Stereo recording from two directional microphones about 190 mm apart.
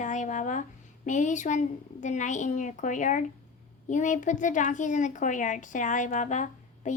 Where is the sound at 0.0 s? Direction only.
40° left (ahead or behind).